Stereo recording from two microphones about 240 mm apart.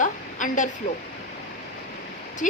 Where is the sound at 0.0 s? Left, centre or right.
Left.